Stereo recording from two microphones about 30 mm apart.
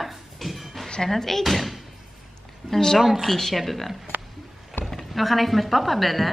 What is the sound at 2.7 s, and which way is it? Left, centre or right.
Speech, centre.